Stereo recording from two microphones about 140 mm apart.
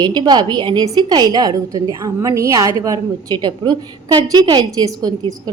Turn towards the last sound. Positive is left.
turn(degrees=-30)  # may be behind; listen again after turning